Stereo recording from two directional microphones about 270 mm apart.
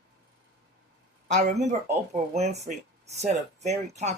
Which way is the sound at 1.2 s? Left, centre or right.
Right.